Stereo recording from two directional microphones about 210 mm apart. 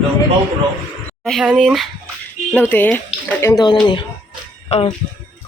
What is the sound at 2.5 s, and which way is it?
Speech, 10° left (ahead or behind).